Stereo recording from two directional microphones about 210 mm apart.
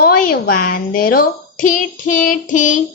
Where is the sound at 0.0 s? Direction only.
45° left (ahead or behind).